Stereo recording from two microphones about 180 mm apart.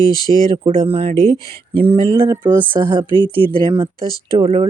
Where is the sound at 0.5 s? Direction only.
30° right (ahead or behind).